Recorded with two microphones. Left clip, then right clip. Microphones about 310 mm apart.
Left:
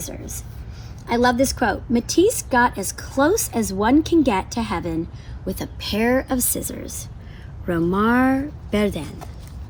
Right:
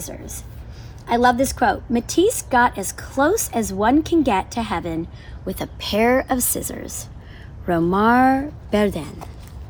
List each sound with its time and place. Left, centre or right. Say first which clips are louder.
1.0 s a woman's voice: right 2 dB; centre
9.0 s speech: right 1 dB; centre